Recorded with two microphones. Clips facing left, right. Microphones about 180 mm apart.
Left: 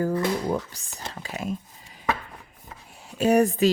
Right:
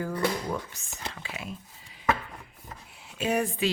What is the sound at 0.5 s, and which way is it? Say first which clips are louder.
Speech: left 6 dB; 35° left (ahead or behind).